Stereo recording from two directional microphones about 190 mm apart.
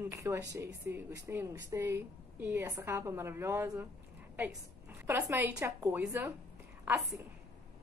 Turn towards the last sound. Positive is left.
turn(degrees=-10)  # may be behind; listen again after turning